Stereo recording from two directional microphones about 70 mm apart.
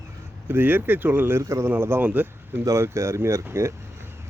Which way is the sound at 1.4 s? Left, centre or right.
Right.